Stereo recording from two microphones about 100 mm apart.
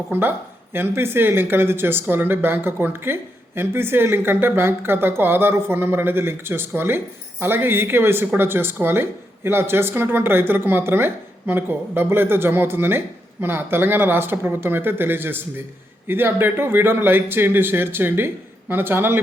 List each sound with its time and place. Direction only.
0.1 s speech: 20° right (ahead or behind)